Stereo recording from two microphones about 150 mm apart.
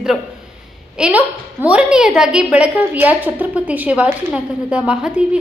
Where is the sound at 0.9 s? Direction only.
5° right (ahead or behind).